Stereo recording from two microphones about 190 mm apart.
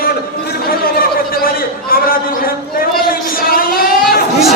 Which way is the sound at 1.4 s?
50° left (ahead or behind).